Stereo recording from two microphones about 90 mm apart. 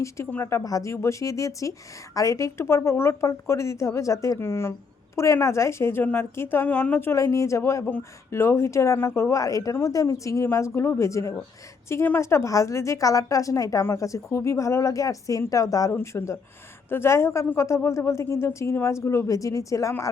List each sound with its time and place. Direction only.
0.3 s speech: 25° left (ahead or behind)
0.6 s a woman's voice: 40° left (ahead or behind); by 7.1 s 20° left (ahead or behind)
7.1 s a woman's voice: 35° left (ahead or behind)
15.9 s a woman's voice: 30° left (ahead or behind)